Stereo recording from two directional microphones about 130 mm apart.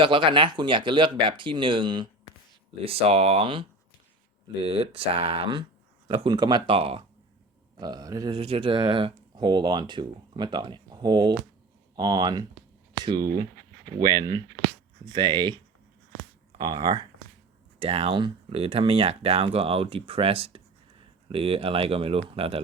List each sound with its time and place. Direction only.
0.0 s speech: 40° right (ahead or behind)
2.8 s speech: 50° right (ahead or behind)
6.3 s speech: 35° right (ahead or behind)
7.8 s speech: 30° right (ahead or behind)
8.3 s speech: 45° right (ahead or behind); by 13.5 s 30° right (ahead or behind)
15.0 s speech: 35° right (ahead or behind)
16.6 s speech: 35° right (ahead or behind)
17.7 s speech: 50° right (ahead or behind)